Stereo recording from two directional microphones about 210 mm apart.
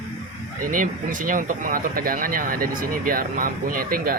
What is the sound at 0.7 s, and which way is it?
Speech, 40° right (ahead or behind).